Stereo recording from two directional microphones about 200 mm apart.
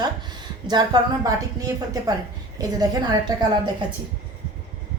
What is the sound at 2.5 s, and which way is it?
Speech, 20° right (ahead or behind).